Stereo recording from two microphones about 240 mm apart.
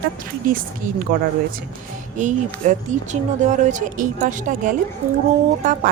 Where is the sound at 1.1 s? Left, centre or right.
Right.